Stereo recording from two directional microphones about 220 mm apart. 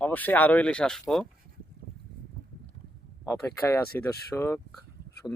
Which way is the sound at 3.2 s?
10° left (ahead or behind).